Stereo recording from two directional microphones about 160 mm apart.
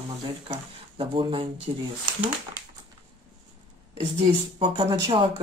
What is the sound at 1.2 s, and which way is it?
Speech, 30° right (ahead or behind).